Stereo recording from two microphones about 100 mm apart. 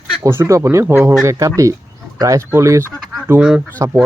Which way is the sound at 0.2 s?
25° right (ahead or behind).